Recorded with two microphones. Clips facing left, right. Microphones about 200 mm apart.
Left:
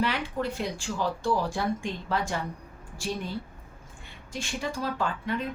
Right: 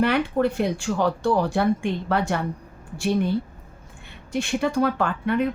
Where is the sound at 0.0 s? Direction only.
55° right (ahead or behind).